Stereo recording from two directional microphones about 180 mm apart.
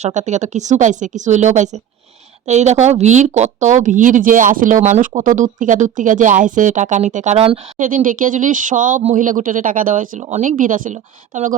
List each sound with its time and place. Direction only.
0.0 s speech: 40° right (ahead or behind)
7.8 s speech: 50° right (ahead or behind)